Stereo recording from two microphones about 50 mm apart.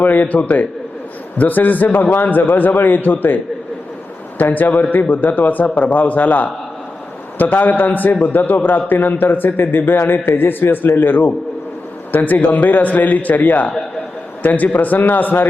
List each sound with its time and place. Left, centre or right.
0.0 s a man's voice: left
4.4 s a man's voice: left